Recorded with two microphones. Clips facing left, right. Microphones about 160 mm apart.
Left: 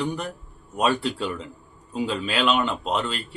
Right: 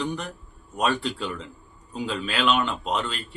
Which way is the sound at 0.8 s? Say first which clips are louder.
Left 2 dB; 5° left (ahead or behind).